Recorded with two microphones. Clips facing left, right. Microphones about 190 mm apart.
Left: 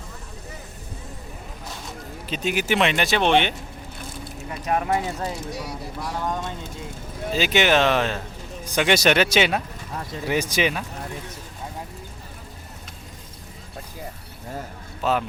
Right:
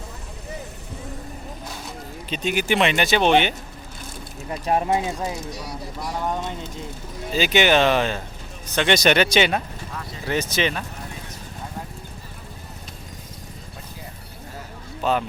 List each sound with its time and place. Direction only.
2.3 s speech: centre (ahead or behind)
4.6 s speech: 30° right (ahead or behind)
7.3 s speech: centre (ahead or behind)
10.2 s speech: 10° left (ahead or behind)
15.0 s speech: centre (ahead or behind)